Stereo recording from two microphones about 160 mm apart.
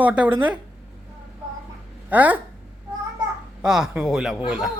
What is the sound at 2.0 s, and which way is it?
Speech, 10° right (ahead or behind).